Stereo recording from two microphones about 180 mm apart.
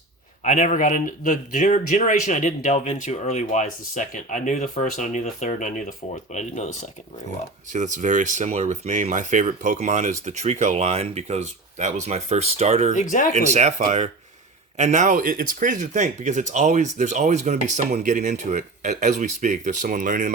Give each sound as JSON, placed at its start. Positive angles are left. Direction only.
{"t": 0.4, "sound": "speech", "side_deg": 40}
{"t": 7.7, "sound": "speech", "side_deg": -45}
{"t": 12.9, "sound": "speech", "side_deg": 45}
{"t": 13.3, "sound": "speech", "side_deg": -40}